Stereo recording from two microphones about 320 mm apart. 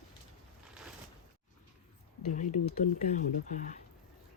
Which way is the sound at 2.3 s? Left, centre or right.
Left.